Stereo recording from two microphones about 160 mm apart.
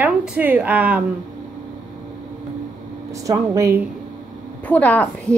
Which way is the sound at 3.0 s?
20° right (ahead or behind).